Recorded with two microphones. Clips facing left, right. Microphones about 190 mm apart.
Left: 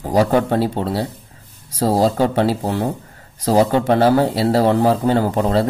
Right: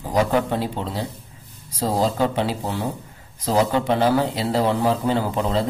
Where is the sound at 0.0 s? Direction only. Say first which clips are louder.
Left 4 dB; 40° left (ahead or behind).